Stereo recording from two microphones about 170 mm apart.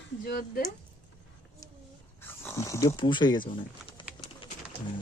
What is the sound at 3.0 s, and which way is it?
Speech, 25° left (ahead or behind).